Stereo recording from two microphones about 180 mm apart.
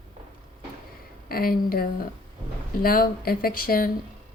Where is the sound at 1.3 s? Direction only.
55° left (ahead or behind).